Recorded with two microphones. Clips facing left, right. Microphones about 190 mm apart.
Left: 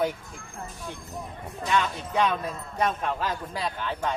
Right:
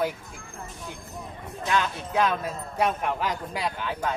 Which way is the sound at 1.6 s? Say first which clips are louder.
Even; 5° right (ahead or behind).